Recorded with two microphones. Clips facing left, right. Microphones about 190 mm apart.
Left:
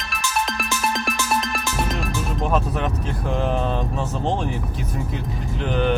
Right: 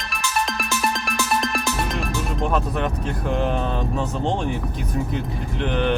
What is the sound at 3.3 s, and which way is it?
Speech, centre (ahead or behind).